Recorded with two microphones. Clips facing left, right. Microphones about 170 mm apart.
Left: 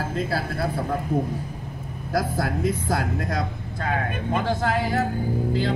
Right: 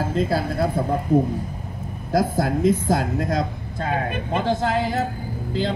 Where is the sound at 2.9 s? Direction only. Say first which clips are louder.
Right 4 dB; 30° right (ahead or behind).